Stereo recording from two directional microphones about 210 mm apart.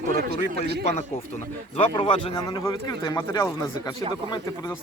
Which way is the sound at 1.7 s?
25° left (ahead or behind).